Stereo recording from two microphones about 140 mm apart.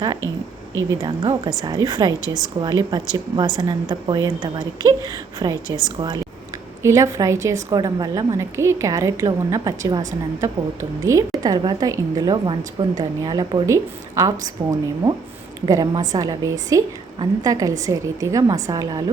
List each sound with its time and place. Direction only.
1.0 s a woman's voice: 30° right (ahead or behind)